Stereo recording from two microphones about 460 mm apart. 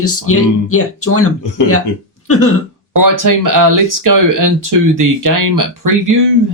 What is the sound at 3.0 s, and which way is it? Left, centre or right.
Speech, right.